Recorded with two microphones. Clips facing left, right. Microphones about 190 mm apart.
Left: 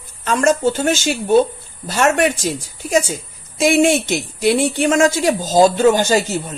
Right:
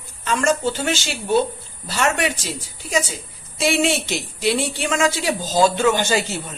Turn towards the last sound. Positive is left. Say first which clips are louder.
# left 5 dB
turn(degrees=40)  # may be behind; listen again after turning